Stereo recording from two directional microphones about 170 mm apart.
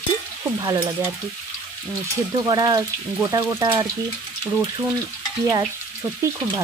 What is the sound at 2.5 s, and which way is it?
Frying, 20° right (ahead or behind).